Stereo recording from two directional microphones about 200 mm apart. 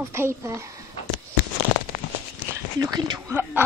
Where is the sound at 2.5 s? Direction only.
20° right (ahead or behind).